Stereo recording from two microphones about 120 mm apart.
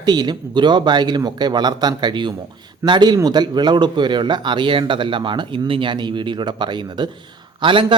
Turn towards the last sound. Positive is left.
turn(degrees=-45)  # may be behind; listen again after turning